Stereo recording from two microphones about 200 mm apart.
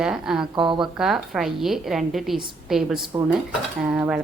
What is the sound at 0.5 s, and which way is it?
Speech, 25° right (ahead or behind).